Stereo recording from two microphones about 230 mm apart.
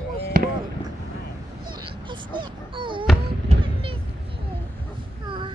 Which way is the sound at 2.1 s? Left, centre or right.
Right.